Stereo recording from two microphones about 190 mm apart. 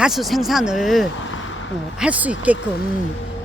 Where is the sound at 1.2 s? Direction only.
90° left.